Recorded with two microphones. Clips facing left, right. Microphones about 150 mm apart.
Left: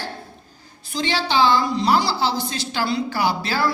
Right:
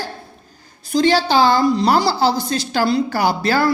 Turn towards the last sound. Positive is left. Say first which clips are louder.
# right 5 dB
turn(degrees=-45)  # may be behind; listen again after turning